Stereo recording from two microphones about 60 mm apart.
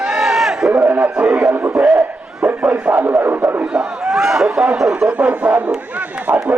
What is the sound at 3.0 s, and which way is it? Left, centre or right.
Speech, right.